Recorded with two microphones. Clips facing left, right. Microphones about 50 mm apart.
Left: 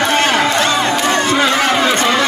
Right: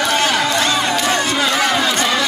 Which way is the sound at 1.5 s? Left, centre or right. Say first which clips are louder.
Left 3 dB; left.